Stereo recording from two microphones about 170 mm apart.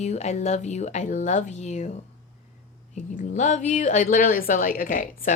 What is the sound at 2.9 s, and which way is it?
A woman's voice, 45° left (ahead or behind).